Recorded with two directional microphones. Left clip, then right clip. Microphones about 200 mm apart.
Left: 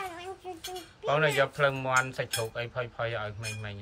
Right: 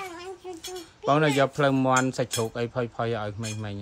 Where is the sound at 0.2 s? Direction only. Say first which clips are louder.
Right 2 dB; centre (ahead or behind).